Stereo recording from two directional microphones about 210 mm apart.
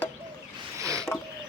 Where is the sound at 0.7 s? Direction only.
15° right (ahead or behind).